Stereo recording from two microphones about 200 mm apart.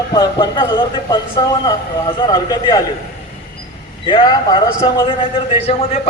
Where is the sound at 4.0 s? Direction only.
25° left (ahead or behind).